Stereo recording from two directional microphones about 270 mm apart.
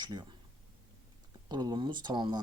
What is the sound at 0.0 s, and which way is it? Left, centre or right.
Speech, centre.